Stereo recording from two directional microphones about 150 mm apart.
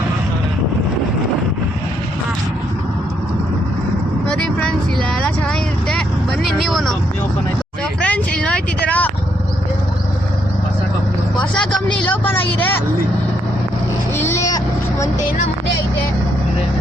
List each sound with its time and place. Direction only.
4.3 s vehicle: 5° left (ahead or behind)
6.4 s speech: centre (ahead or behind)
8.0 s a sound: 10° left (ahead or behind)
12.0 s vehicle: 10° left (ahead or behind)
14.2 s vehicle: 20° left (ahead or behind)